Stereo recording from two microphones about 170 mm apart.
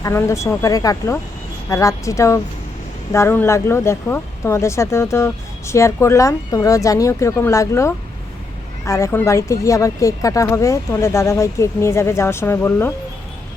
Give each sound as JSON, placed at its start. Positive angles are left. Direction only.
{"t": 0.0, "sound": "speech", "side_deg": 15}